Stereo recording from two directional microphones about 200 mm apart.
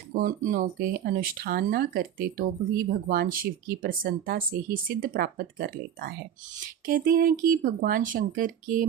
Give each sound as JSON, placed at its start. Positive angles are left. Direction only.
{"t": 0.1, "sound": "speech", "side_deg": -45}